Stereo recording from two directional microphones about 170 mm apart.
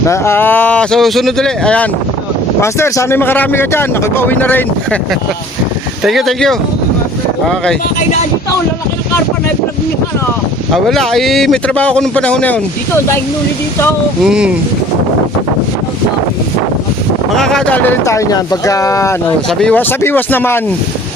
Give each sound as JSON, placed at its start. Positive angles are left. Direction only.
{"t": 0.0, "sound": "speech", "side_deg": 15}
{"t": 6.0, "sound": "speech", "side_deg": 0}
{"t": 10.8, "sound": "speech", "side_deg": 0}
{"t": 14.3, "sound": "speech", "side_deg": -5}
{"t": 17.3, "sound": "speech", "side_deg": 5}
{"t": 19.5, "sound": "speech", "side_deg": 5}